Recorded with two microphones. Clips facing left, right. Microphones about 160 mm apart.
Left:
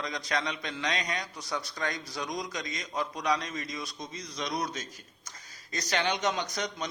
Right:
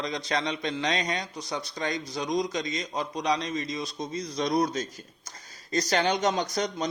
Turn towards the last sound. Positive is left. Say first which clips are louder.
# right 5 dB
turn(degrees=-35)  # may be behind; listen again after turning